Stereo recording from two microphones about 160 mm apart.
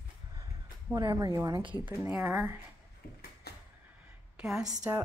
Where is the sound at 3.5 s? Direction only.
85° left.